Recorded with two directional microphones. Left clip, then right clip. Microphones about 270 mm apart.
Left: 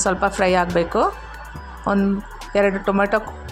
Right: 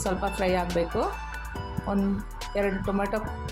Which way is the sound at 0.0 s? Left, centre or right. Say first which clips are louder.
Left 9 dB; centre.